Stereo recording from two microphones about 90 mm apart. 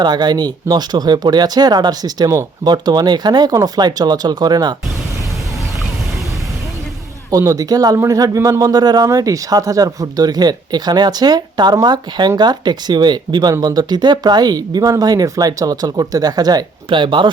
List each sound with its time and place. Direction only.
0.0 s speech: 55° right (ahead or behind)
7.3 s speech: 40° right (ahead or behind); by 17.3 s 65° right (ahead or behind)